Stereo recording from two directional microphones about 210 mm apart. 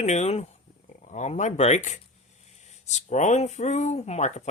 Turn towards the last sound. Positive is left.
turn(degrees=35)  # may be behind; listen again after turning